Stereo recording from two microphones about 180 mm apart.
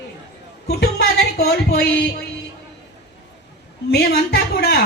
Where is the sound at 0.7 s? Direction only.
60° left (ahead or behind).